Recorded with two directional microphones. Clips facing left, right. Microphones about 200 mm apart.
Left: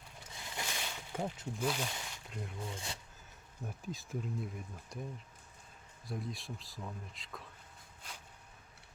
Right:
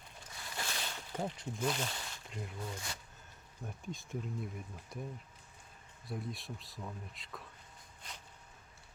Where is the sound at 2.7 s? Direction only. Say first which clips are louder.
Even; 25° left (ahead or behind).